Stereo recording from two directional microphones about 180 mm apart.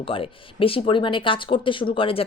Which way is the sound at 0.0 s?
30° left (ahead or behind).